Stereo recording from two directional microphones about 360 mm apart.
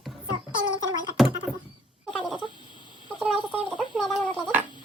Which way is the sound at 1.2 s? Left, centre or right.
Centre.